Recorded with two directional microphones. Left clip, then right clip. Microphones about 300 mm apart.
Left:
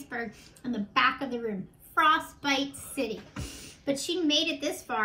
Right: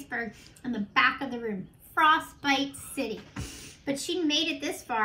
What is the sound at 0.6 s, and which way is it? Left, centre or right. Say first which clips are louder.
Speech: right 1 dB; centre.